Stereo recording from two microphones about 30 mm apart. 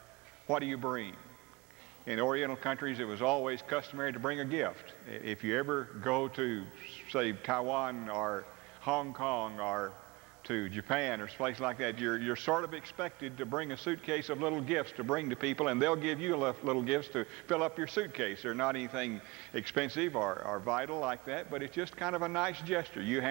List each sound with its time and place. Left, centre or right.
0.5 s a man's voice: centre